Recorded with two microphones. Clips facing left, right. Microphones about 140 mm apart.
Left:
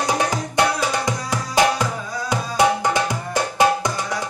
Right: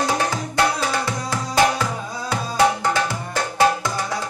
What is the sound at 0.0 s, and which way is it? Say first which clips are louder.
Music: left 1 dB; 15° left (ahead or behind).